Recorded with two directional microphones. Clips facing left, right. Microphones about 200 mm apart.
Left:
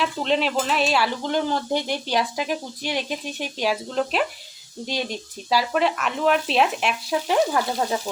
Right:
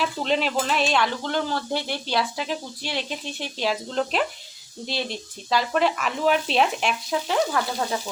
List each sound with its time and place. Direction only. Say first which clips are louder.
0.0 s speech: left 1 dB; centre (ahead or behind)
1.2 s speech: left 3 dB; 15° left (ahead or behind)
4.9 s speech: left 2 dB; 15° left (ahead or behind)
7.3 s frying: left 3 dB; 20° left (ahead or behind)